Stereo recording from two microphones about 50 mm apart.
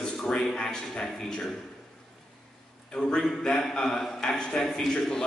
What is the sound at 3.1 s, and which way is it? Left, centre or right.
A man's voice, centre.